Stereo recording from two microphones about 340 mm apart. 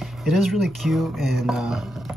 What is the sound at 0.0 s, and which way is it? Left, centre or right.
Speech, centre.